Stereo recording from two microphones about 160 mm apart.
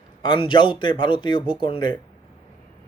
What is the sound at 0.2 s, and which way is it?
Speech, 30° left (ahead or behind).